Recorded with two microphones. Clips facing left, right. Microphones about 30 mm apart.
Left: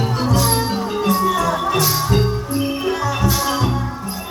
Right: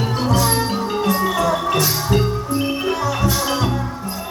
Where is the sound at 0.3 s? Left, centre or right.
Centre.